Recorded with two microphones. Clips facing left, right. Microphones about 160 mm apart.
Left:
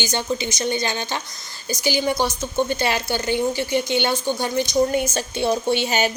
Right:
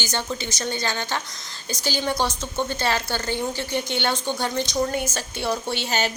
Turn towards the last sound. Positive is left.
turn(degrees=15)  # may be behind; listen again after turning